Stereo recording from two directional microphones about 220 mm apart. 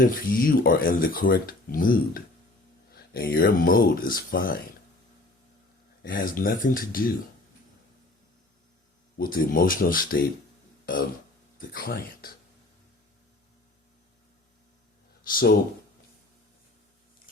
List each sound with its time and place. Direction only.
0.0 s speech: 40° left (ahead or behind)
6.0 s speech: 40° left (ahead or behind)
9.1 s speech: 40° left (ahead or behind)
11.5 s speech: 40° left (ahead or behind)
15.3 s speech: 40° left (ahead or behind)